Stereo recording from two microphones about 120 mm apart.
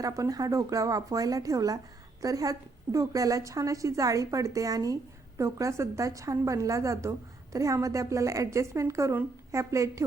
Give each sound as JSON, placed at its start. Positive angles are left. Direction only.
{"t": 0.0, "sound": "a woman's voice", "side_deg": -30}